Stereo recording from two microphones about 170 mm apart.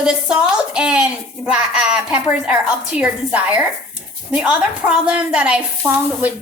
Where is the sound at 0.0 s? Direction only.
5° right (ahead or behind).